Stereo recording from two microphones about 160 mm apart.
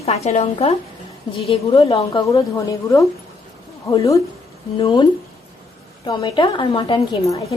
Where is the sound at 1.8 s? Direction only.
20° left (ahead or behind).